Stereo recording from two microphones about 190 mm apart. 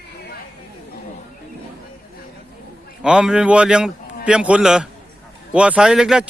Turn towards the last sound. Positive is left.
turn(degrees=-5)  # may be behind; listen again after turning